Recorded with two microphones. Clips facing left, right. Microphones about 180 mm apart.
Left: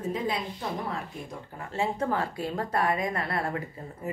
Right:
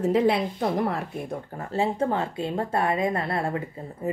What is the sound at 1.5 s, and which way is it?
A woman's voice, 30° right (ahead or behind).